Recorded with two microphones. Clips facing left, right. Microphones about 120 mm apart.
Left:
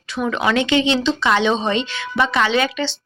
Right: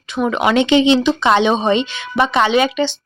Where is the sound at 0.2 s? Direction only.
20° right (ahead or behind).